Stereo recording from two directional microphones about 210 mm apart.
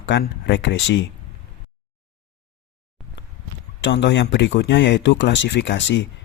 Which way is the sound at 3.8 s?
60° left (ahead or behind).